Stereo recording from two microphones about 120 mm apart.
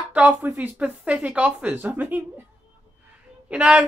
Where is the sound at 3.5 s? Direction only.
10° right (ahead or behind).